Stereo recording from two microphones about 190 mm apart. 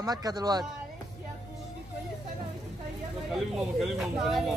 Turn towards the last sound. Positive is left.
turn(degrees=0)  # may be behind; listen again after turning